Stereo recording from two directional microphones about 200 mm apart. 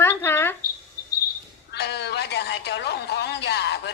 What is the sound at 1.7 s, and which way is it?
A woman's voice, 55° left (ahead or behind).